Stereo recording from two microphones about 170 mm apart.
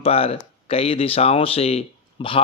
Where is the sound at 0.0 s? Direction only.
35° left (ahead or behind).